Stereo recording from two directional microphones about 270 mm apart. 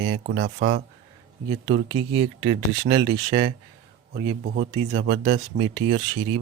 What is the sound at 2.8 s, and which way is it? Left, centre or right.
Speech, right.